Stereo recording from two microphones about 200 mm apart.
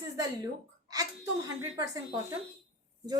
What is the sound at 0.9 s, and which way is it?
A woman's voice, 15° right (ahead or behind).